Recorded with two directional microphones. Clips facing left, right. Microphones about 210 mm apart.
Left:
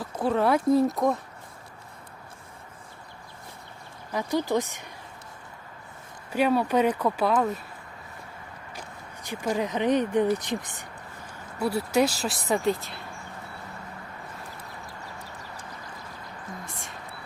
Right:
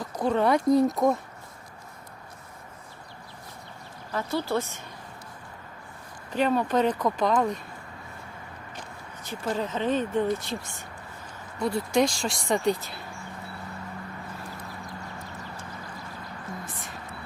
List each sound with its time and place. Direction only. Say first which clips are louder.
0.2 s speech: even; 5° left (ahead or behind)
4.1 s speech: left 2 dB; 15° left (ahead or behind)
6.3 s speech: left 1 dB; 10° left (ahead or behind)
9.2 s speech: left 2 dB; 15° left (ahead or behind)